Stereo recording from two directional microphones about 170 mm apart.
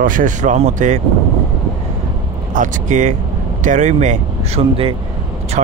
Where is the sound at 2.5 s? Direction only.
45° right (ahead or behind).